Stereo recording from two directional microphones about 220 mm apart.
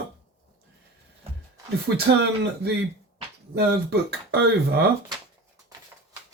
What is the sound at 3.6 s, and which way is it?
Speech, 45° right (ahead or behind).